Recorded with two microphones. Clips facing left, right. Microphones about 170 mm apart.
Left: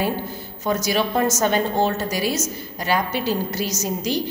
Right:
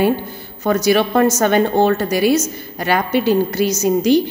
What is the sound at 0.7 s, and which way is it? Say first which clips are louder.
A woman's voice: right 7 dB; 60° right (ahead or behind).